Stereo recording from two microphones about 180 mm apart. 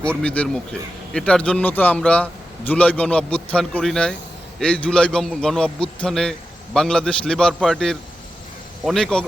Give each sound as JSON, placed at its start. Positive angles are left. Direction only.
{"t": 0.0, "sound": "a man's voice", "side_deg": 5}